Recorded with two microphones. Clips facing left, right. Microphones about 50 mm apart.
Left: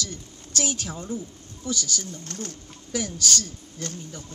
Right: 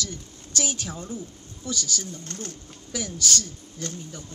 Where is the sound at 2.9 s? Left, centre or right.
Left.